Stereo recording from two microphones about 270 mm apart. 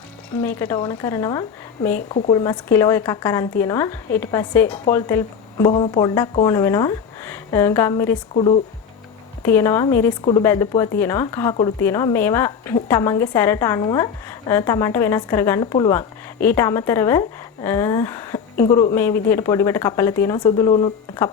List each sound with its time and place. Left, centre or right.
0.4 s speech: centre
2.0 s speech: left
2.3 s speech: centre
8.3 s speech: left
9.4 s speech: centre
19.3 s speech: centre